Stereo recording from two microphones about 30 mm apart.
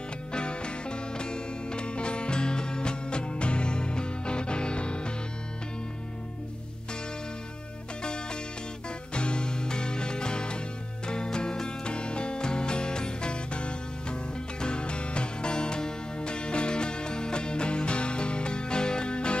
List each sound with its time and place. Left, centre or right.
0.3 s music: left
8.0 s music: left